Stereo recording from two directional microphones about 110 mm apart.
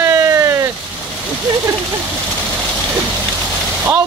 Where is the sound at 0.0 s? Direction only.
30° right (ahead or behind).